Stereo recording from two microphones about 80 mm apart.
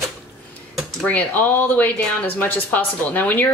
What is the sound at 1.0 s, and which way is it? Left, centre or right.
Speech, left.